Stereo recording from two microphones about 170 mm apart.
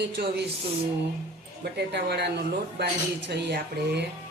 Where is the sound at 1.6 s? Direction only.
75° right (ahead or behind).